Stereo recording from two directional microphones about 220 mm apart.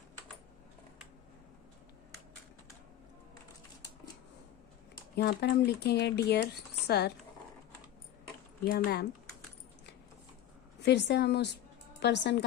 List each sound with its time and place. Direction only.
5.1 s speech: 50° left (ahead or behind)
8.7 s speech: 45° left (ahead or behind)
10.8 s speech: 50° left (ahead or behind)